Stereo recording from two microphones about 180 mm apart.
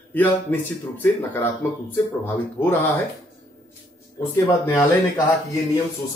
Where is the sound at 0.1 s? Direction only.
10° left (ahead or behind).